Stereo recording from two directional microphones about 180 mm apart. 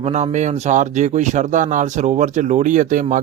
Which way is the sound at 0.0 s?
40° right (ahead or behind).